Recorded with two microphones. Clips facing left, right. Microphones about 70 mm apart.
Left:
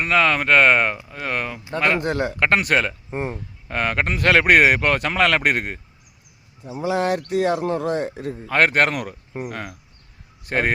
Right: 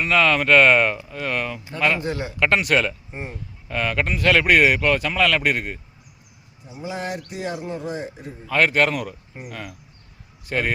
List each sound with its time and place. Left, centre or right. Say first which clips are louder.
0.0 s speech: even; left
2.0 s speech: left 4 dB; left
2.4 s speech: right 1 dB; left
6.8 s speech: left 8 dB; left
8.4 s speech: left 1 dB; left
9.0 s speech: left 5 dB; left